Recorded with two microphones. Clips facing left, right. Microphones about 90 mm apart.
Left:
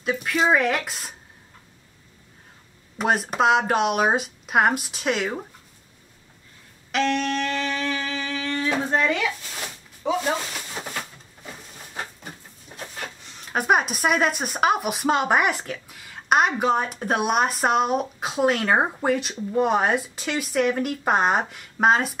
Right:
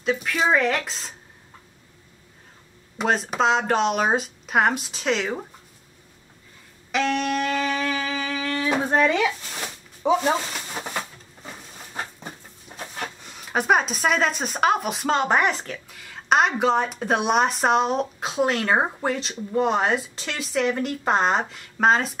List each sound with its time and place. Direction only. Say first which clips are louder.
0.0 s speech: even; 5° left (ahead or behind)
3.0 s speech: left 1 dB; 5° left (ahead or behind)
6.9 s wind instrument: even; 5° right (ahead or behind)
8.6 s speech: right 2 dB; 20° right (ahead or behind)
10.0 s a sound: right 3 dB; 20° right (ahead or behind)
12.7 s a sound: right 2 dB; 15° right (ahead or behind)
13.6 s speech: even; 5° left (ahead or behind)